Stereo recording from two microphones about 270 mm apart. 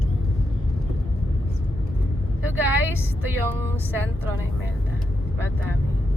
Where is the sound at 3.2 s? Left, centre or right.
Centre.